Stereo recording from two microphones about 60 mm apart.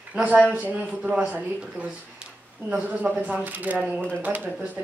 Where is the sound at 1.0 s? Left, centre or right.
Centre.